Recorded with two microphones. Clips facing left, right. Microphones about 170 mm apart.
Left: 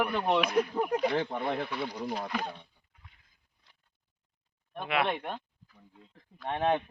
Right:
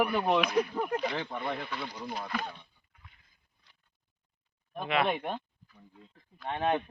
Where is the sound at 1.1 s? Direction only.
50° left (ahead or behind).